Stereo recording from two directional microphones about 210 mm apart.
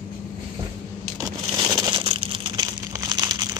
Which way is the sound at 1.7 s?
20° right (ahead or behind).